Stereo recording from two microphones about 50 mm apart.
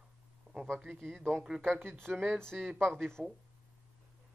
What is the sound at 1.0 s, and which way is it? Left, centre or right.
Speech, centre.